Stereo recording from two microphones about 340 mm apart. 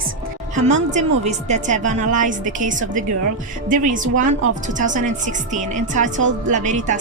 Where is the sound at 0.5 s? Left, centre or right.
Right.